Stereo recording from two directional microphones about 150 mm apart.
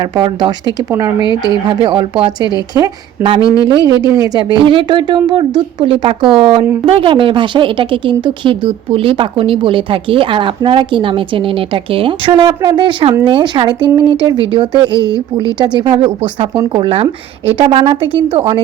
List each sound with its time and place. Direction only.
0.0 s speech: 30° right (ahead or behind)
1.2 s speech: 30° left (ahead or behind)
1.6 s a woman's voice: 30° right (ahead or behind)
4.6 s a woman's voice: 35° right (ahead or behind)